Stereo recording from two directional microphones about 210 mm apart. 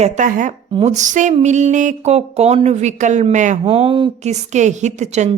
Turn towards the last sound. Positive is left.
turn(degrees=-35)  # may be behind; listen again after turning